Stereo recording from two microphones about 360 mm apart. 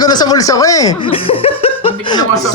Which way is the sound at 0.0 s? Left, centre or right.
Centre.